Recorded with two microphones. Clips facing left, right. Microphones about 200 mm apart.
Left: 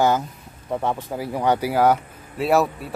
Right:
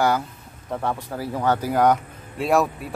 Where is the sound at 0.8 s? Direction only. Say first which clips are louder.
Even; 15° left (ahead or behind).